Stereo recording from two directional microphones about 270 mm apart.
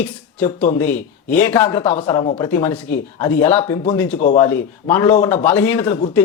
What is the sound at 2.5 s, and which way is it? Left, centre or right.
Speech, centre.